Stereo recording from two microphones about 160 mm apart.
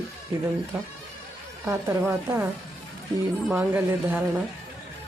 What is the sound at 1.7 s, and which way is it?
Speech, 15° right (ahead or behind).